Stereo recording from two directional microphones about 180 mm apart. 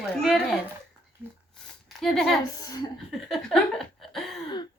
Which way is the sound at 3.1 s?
Centre (ahead or behind).